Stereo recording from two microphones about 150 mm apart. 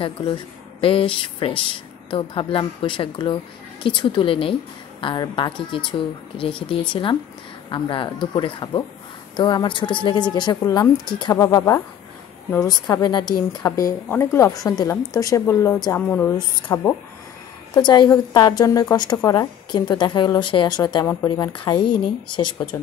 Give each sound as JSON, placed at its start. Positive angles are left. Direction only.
{"t": 0.0, "sound": "speech", "side_deg": 35}
{"t": 11.3, "sound": "a woman's voice", "side_deg": 20}
{"t": 16.7, "sound": "a woman's voice", "side_deg": 25}